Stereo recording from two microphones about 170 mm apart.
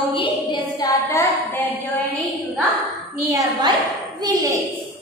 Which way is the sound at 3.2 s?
20° right (ahead or behind).